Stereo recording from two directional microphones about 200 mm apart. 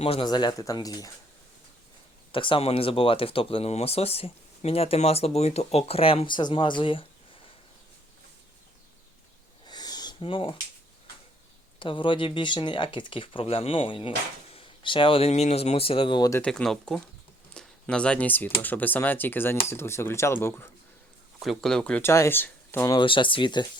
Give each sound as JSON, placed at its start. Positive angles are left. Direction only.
{"t": 0.0, "sound": "speech", "side_deg": 25}
{"t": 2.3, "sound": "speech", "side_deg": 25}
{"t": 9.6, "sound": "a sound", "side_deg": 20}
{"t": 11.8, "sound": "speech", "side_deg": 25}
{"t": 16.4, "sound": "speech", "side_deg": 5}
{"t": 21.3, "sound": "speech", "side_deg": 0}
{"t": 23.0, "sound": "speech", "side_deg": 25}